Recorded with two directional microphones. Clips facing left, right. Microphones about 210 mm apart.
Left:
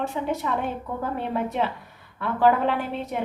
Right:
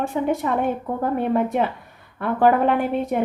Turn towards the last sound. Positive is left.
turn(degrees=-50)  # may be behind; listen again after turning